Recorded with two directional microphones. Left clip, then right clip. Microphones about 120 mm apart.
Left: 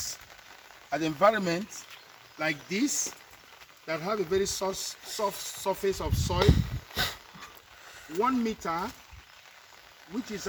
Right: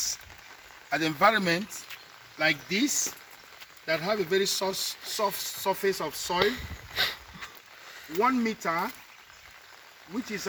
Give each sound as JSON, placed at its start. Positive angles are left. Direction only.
{"t": 0.9, "sound": "speech", "side_deg": 0}
{"t": 6.4, "sound": "a sound", "side_deg": 10}
{"t": 8.1, "sound": "speech", "side_deg": 0}